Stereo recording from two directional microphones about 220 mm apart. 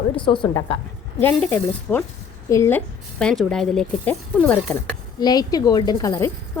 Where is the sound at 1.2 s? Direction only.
5° left (ahead or behind).